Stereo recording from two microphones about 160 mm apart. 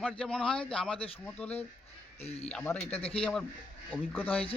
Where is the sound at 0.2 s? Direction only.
5° left (ahead or behind).